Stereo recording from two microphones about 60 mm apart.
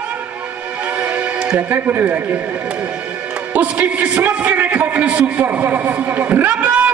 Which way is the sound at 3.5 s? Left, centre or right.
Right.